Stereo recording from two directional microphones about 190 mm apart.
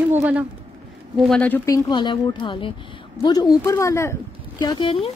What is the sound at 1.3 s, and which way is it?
A woman's voice, 5° left (ahead or behind).